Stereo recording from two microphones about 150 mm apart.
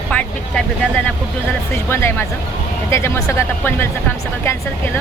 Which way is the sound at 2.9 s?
20° left (ahead or behind).